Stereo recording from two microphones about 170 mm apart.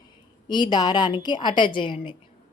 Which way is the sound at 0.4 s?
25° left (ahead or behind).